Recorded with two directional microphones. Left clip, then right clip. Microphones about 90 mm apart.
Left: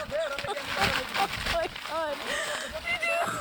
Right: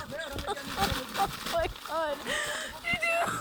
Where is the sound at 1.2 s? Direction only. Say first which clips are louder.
Left 2 dB; 15° right (ahead or behind).